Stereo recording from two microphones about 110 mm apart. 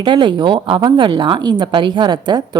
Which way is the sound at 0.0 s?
45° right (ahead or behind).